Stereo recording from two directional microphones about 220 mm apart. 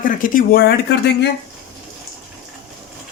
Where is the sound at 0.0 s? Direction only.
40° left (ahead or behind).